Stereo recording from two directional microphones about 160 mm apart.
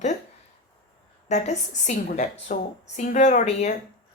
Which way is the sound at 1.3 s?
45° left (ahead or behind).